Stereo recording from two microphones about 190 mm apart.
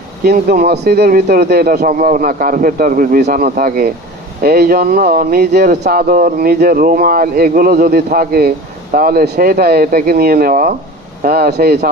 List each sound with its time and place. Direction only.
0.3 s speech: 55° right (ahead or behind)